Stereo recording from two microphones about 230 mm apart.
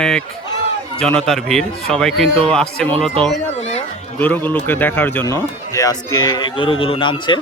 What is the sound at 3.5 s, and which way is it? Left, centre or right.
Speech, left.